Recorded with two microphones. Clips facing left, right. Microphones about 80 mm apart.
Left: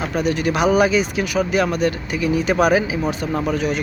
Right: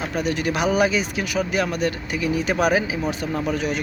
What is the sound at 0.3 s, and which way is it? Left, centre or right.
Speech, right.